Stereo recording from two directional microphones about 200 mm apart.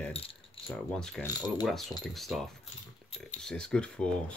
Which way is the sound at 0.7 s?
5° left (ahead or behind).